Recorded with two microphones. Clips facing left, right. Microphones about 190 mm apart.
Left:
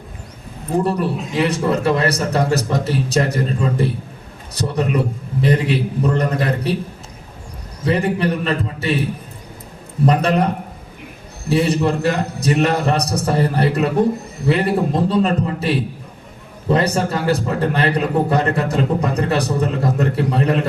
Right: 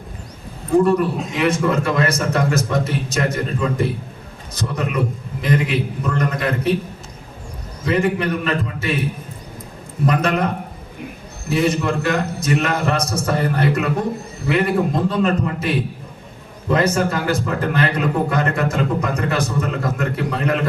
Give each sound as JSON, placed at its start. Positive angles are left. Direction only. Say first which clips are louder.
{"t": 0.9, "sound": "a man's voice", "louder": "right 2 dB", "side_deg": 35}
{"t": 7.9, "sound": "a man's voice", "louder": "left 1 dB", "side_deg": 35}
{"t": 10.1, "sound": "a man's voice", "louder": "left 2 dB", "side_deg": 35}